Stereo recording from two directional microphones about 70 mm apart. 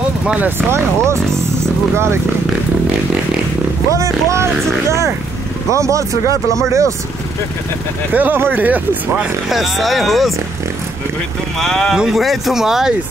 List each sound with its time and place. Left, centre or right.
0.6 s speech: right
3.9 s speech: right
8.1 s speech: right
9.2 s speech: centre
11.6 s speech: centre